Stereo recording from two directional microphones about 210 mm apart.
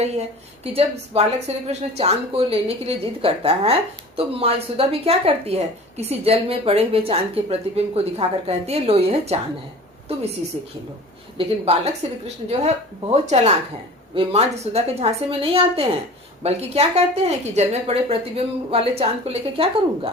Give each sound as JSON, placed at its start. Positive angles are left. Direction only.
{"t": 0.0, "sound": "a woman's voice", "side_deg": -30}
{"t": 11.4, "sound": "a woman's voice", "side_deg": -25}